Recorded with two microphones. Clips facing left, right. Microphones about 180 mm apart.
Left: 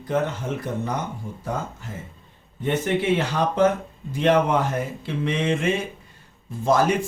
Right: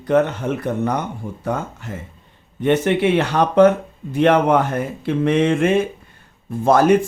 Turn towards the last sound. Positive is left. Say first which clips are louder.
# right 5 dB
turn(degrees=-55)  # may be behind; listen again after turning